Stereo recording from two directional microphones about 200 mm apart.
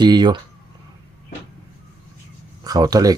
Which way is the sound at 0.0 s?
20° right (ahead or behind).